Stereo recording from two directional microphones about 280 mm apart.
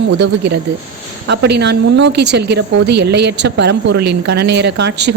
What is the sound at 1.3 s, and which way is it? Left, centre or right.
A woman's voice, right.